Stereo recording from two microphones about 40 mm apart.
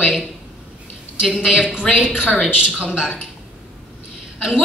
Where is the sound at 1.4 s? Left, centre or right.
Right.